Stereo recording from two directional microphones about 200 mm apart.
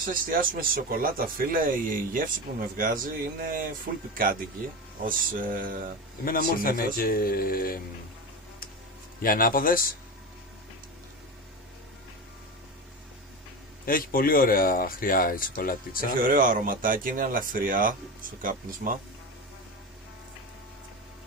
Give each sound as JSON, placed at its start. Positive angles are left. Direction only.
{"t": 0.0, "sound": "speech", "side_deg": -45}
{"t": 6.2, "sound": "speech", "side_deg": 45}
{"t": 9.2, "sound": "speech", "side_deg": 45}
{"t": 13.8, "sound": "speech", "side_deg": 45}
{"t": 16.2, "sound": "speech", "side_deg": -45}